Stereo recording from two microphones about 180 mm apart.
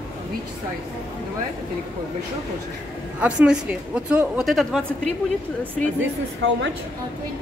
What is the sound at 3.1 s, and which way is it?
Speech, 5° right (ahead or behind).